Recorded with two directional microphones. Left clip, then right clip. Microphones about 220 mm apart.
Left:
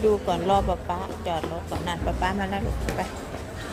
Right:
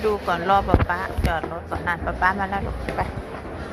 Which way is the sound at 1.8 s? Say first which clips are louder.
Right 6 dB; 25° left (ahead or behind).